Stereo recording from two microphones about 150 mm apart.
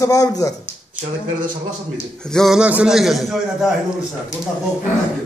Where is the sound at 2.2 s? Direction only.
5° left (ahead or behind).